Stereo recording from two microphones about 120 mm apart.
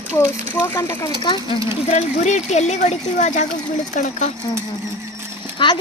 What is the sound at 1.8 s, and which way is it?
Speech, 70° left (ahead or behind).